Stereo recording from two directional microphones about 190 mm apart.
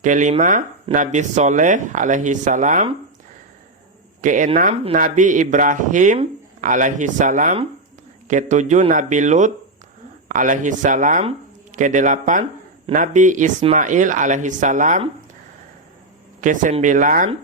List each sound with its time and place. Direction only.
0.0 s speech: 40° right (ahead or behind)
4.2 s speech: 40° right (ahead or behind)
16.4 s speech: 40° right (ahead or behind)